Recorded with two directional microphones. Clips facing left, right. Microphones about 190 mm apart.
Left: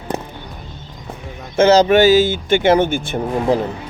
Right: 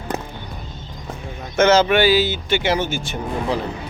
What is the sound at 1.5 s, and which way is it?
Speech, 35° left (ahead or behind).